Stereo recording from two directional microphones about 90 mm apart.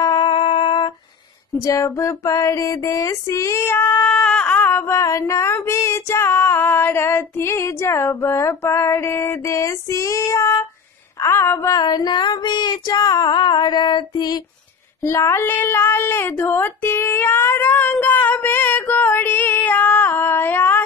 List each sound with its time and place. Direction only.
0.0 s music: 50° left (ahead or behind)
0.3 s music: 85° left; by 0.9 s 65° left (ahead or behind)
1.6 s female singing: 35° left (ahead or behind)
4.0 s a sound: 10° left (ahead or behind); by 5.2 s 35° left (ahead or behind)
5.2 s female singing: 30° left (ahead or behind)
11.1 s a sound: 30° left (ahead or behind)
11.8 s female singing: 50° left (ahead or behind)
15.0 s child singing: 30° left (ahead or behind)
17.9 s female singing: 20° left (ahead or behind)